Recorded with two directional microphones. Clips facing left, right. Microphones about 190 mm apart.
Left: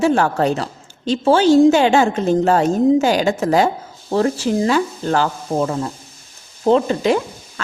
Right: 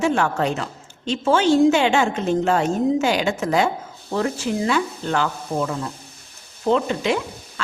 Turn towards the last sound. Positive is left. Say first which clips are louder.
# left 5 dB
turn(degrees=40)  # may be behind; listen again after turning